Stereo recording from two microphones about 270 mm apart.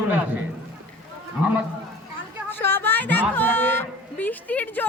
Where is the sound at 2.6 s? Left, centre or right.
Centre.